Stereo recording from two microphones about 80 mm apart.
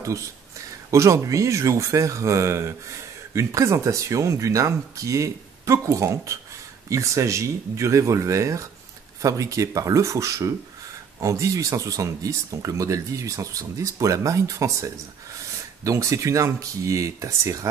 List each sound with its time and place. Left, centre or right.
0.9 s speech: right